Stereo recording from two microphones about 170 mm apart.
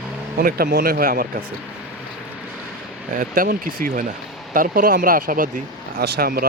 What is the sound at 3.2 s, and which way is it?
Speech, 55° right (ahead or behind).